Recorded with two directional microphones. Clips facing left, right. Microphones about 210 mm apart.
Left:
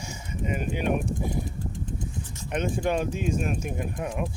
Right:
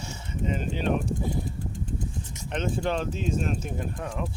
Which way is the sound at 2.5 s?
10° left (ahead or behind).